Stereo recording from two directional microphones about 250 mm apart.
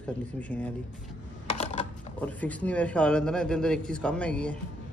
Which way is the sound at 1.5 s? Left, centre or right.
Left.